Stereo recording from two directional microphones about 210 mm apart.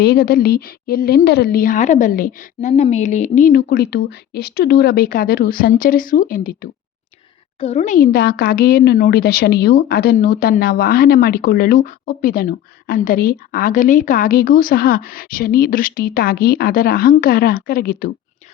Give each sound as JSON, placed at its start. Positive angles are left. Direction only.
{"t": 0.0, "sound": "speech", "side_deg": 45}
{"t": 7.6, "sound": "speech", "side_deg": 30}